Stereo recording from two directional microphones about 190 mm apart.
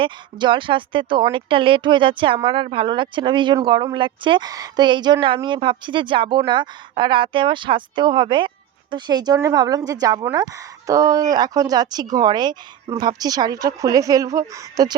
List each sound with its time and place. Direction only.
0.0 s a woman's voice: 25° right (ahead or behind)